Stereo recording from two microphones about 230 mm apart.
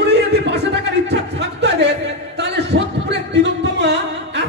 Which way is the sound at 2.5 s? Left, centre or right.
Right.